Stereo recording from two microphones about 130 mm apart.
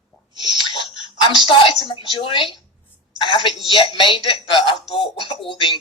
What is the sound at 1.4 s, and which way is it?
A woman's voice, 40° left (ahead or behind).